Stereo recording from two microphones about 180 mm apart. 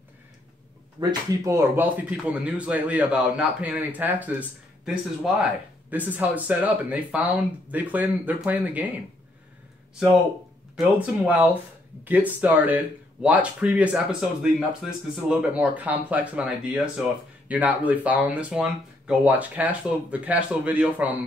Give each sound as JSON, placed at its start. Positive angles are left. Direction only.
{"t": 1.0, "sound": "speech", "side_deg": -25}
{"t": 1.4, "sound": "a man's voice", "side_deg": -15}
{"t": 10.8, "sound": "a man's voice", "side_deg": -10}